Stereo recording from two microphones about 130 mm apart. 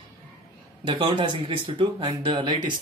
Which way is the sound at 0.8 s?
35° right (ahead or behind).